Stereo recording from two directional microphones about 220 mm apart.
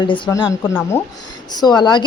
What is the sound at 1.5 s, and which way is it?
Speech, 20° left (ahead or behind).